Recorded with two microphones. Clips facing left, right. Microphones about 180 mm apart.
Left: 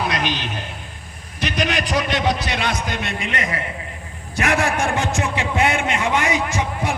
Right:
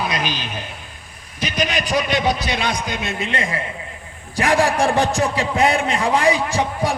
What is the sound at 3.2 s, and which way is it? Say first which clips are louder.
A man's voice: right 1 dB; 30° right (ahead or behind).